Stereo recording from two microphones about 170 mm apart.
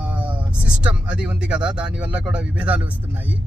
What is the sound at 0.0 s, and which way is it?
Vehicle, 10° right (ahead or behind).